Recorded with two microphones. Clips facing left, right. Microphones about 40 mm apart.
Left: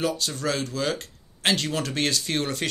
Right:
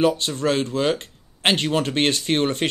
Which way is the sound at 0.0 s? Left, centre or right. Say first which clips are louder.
Right 7 dB; right.